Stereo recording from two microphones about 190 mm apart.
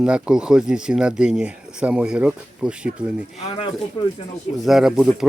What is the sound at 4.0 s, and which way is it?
Speech, 25° left (ahead or behind).